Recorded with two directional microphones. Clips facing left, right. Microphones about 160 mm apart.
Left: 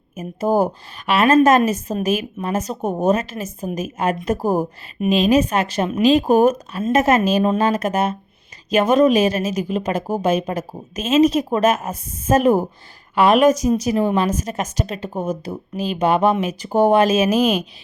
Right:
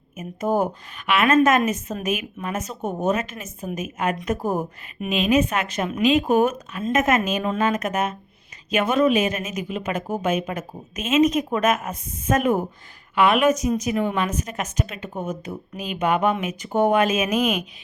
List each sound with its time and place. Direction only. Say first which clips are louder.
0.2 s a woman's voice: left 4 dB; 30° left (ahead or behind)